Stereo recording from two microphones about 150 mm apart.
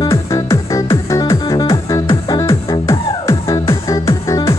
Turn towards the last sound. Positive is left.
turn(degrees=20)  # may be behind; listen again after turning